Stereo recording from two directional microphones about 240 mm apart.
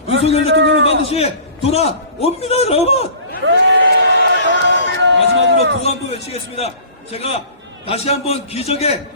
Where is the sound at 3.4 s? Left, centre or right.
Right.